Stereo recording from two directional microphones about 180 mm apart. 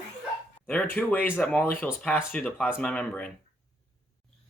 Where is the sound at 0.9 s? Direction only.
10° left (ahead or behind).